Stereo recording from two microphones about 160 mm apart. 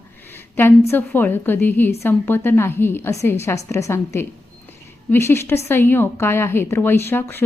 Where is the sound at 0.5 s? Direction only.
15° left (ahead or behind).